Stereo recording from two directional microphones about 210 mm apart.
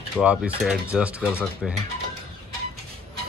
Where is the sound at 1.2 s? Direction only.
5° left (ahead or behind).